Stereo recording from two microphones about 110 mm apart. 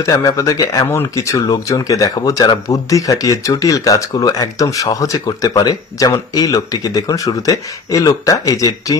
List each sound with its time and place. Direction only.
0.0 s speech: 30° left (ahead or behind)